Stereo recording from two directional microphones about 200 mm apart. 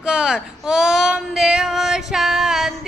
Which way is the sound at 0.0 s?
5° right (ahead or behind).